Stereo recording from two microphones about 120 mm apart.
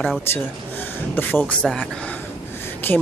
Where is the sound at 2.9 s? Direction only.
15° left (ahead or behind).